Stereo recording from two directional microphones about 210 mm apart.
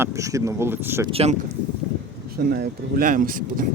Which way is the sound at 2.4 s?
50° right (ahead or behind).